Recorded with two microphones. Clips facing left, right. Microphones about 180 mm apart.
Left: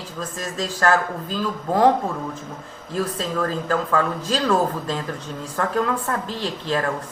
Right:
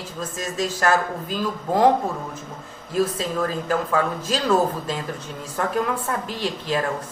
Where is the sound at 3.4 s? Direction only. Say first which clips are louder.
Left 1 dB; 15° right (ahead or behind).